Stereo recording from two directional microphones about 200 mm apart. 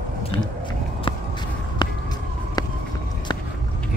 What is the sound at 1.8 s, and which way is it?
Emergency vehicle, 20° left (ahead or behind).